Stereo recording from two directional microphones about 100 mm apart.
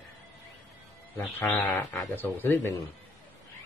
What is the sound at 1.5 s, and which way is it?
Speech, 15° left (ahead or behind).